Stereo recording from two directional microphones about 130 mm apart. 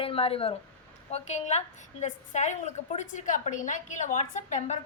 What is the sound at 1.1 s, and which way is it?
A woman's voice, 60° left (ahead or behind).